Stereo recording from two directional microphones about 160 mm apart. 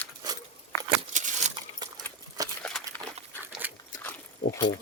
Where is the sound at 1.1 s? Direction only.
50° right (ahead or behind).